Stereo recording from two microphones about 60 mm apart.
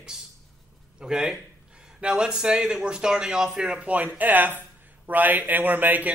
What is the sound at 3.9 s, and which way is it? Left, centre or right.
A man's voice, right.